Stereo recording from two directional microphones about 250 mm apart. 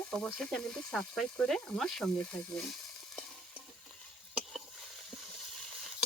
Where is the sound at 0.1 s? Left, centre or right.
Centre.